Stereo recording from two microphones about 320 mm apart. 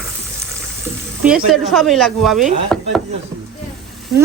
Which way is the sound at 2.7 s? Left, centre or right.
Centre.